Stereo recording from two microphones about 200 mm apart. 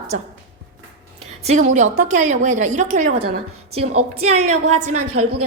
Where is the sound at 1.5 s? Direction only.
35° right (ahead or behind).